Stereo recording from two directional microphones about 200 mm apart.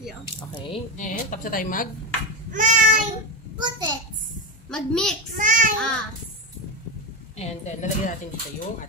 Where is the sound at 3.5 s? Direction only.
20° right (ahead or behind).